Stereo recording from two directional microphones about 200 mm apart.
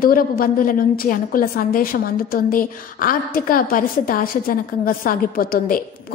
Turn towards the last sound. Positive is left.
turn(degrees=45)  # may be behind; listen again after turning